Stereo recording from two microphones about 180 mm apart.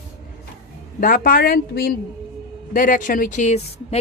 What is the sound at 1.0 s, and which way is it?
Speech, 55° left (ahead or behind).